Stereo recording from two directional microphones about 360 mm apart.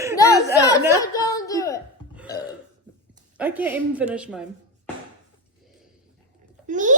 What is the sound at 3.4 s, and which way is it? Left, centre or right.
A man's voice, centre.